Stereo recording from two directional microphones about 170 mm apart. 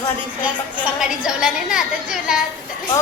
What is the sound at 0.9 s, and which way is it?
A woman's voice, 5° right (ahead or behind).